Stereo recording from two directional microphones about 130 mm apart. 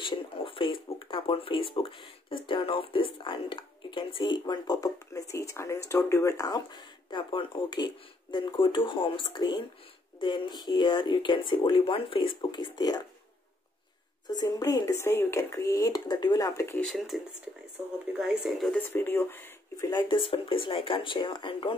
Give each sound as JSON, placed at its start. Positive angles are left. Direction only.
{"t": 0.0, "sound": "speech", "side_deg": 40}
{"t": 14.3, "sound": "speech", "side_deg": 30}
{"t": 16.8, "sound": "speech", "side_deg": 0}
{"t": 18.7, "sound": "speech", "side_deg": 15}
{"t": 19.9, "sound": "speech", "side_deg": 35}